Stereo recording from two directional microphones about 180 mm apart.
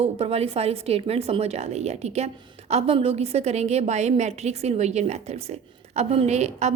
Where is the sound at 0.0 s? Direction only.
35° right (ahead or behind).